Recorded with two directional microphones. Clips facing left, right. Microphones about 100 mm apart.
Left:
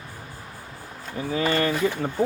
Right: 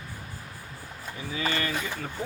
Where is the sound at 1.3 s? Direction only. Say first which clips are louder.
Left 7 dB; 40° left (ahead or behind).